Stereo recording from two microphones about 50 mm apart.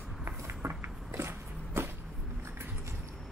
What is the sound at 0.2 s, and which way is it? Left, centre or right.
Walk, right.